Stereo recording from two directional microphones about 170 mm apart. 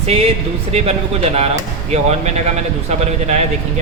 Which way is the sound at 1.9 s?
40° right (ahead or behind).